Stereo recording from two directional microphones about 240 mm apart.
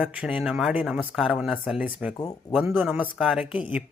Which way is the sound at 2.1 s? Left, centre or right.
Centre.